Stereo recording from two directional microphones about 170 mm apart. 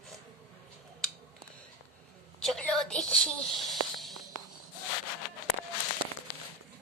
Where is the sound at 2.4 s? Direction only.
5° left (ahead or behind).